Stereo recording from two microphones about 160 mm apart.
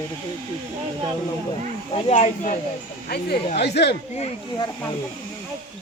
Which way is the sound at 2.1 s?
50° left (ahead or behind).